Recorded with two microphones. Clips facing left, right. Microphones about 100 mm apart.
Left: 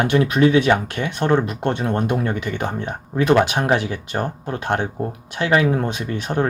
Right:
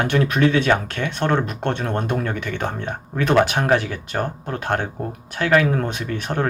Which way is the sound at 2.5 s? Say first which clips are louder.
Left 1 dB; 15° left (ahead or behind).